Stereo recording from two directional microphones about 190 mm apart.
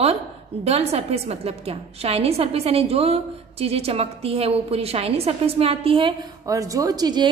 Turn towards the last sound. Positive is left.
turn(degrees=-20)  # may be behind; listen again after turning